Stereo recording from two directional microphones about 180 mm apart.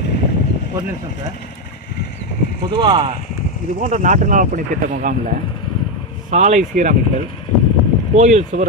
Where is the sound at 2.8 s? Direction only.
25° right (ahead or behind).